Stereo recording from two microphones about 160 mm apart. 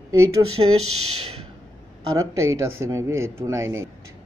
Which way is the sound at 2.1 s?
20° right (ahead or behind).